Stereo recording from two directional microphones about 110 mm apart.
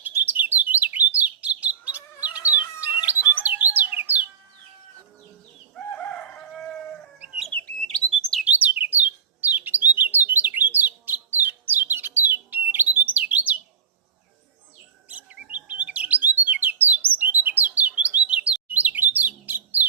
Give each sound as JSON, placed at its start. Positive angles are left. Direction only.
{"t": 0.0, "sound": "bird", "side_deg": -15}
{"t": 5.7, "sound": "chicken", "side_deg": 5}
{"t": 7.2, "sound": "bird", "side_deg": -5}
{"t": 7.9, "sound": "bird", "side_deg": 10}
{"t": 8.4, "sound": "bird", "side_deg": -15}
{"t": 15.1, "sound": "bird", "side_deg": -15}